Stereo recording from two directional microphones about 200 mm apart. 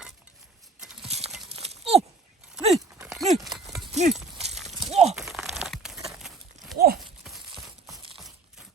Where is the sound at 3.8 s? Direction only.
35° right (ahead or behind).